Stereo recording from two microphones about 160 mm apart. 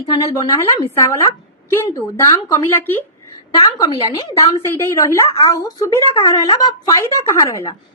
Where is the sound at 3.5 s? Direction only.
25° left (ahead or behind).